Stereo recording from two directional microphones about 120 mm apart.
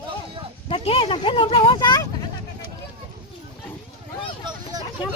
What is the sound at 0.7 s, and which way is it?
Speech, 50° left (ahead or behind).